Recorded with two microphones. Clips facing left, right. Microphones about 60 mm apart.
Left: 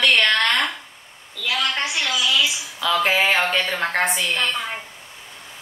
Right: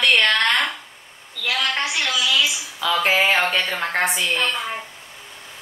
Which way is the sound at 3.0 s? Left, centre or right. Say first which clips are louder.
Right 2 dB; centre.